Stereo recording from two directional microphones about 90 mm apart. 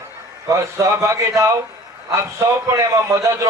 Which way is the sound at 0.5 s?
35° right (ahead or behind).